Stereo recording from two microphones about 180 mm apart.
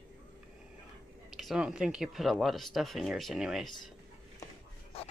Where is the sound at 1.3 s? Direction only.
5° right (ahead or behind).